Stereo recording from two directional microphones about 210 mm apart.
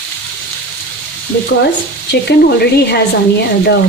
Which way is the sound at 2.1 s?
50° left (ahead or behind).